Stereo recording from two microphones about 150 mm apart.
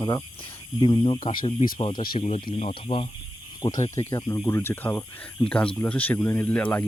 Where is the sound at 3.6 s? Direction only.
25° left (ahead or behind).